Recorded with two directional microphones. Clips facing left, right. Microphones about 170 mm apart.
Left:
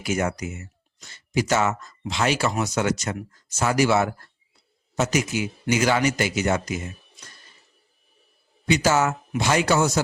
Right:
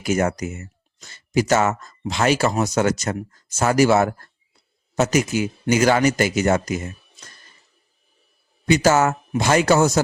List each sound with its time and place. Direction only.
0.0 s speech: 45° right (ahead or behind)
8.6 s speech: 45° right (ahead or behind)